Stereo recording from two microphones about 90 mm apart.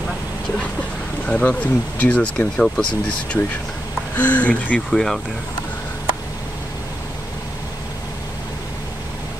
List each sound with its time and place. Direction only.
1.2 s speech: 15° left (ahead or behind)
4.2 s speech: 15° left (ahead or behind)